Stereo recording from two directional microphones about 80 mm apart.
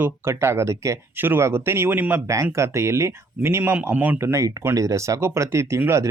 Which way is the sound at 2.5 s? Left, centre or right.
Right.